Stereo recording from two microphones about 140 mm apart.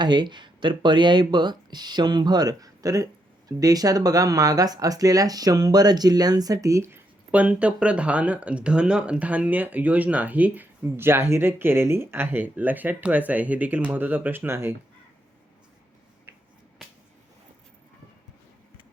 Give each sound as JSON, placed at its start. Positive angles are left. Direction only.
{"t": 0.0, "sound": "speech", "side_deg": -35}